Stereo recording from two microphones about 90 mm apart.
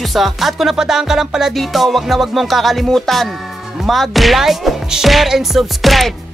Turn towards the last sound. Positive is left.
turn(degrees=0)  # may be behind; listen again after turning